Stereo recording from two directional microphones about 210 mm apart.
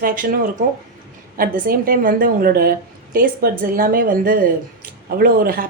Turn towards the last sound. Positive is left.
turn(degrees=-45)  # may be behind; listen again after turning